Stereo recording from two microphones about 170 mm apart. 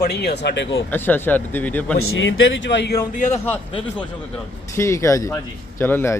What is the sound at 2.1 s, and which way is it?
Speech, 90° left.